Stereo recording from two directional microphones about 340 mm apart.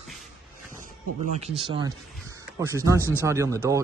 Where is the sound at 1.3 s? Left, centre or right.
Centre.